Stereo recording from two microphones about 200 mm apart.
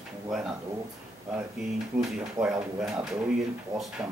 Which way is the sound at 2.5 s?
5° right (ahead or behind).